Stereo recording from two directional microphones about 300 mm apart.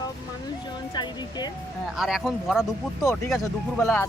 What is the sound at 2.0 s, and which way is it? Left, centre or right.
Speech, centre.